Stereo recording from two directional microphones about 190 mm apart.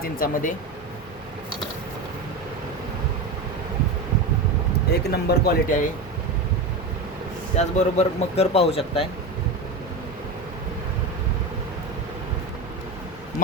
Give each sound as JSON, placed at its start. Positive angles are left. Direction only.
{"t": 0.0, "sound": "speech", "side_deg": 50}
{"t": 4.9, "sound": "speech", "side_deg": 55}
{"t": 7.5, "sound": "speech", "side_deg": 35}